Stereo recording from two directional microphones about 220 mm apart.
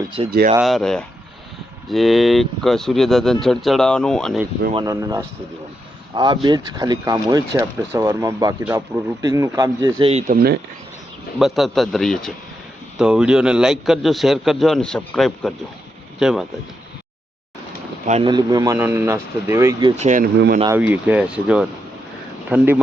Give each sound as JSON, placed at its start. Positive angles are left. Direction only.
{"t": 0.3, "sound": "speech", "side_deg": -45}
{"t": 0.6, "sound": "a man's voice", "side_deg": 0}
{"t": 4.7, "sound": "speech", "side_deg": -15}
{"t": 10.0, "sound": "speech", "side_deg": -30}
{"t": 10.3, "sound": "speech", "side_deg": -45}
{"t": 11.3, "sound": "a man's voice", "side_deg": 0}
{"t": 18.0, "sound": "speech", "side_deg": -30}
{"t": 18.3, "sound": "speech", "side_deg": -20}
{"t": 20.0, "sound": "speech", "side_deg": -35}
{"t": 20.7, "sound": "a man's voice", "side_deg": -5}